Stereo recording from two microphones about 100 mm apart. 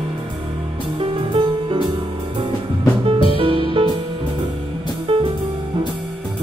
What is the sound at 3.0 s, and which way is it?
Music, 65° right (ahead or behind).